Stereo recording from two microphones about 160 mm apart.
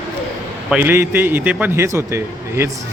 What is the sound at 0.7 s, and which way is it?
A man's voice, 15° right (ahead or behind).